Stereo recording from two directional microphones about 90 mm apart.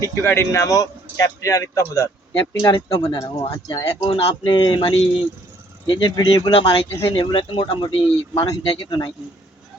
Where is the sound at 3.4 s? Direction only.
75° left (ahead or behind).